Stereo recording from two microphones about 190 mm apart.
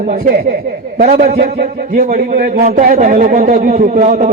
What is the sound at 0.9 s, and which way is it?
A man's voice, 50° right (ahead or behind).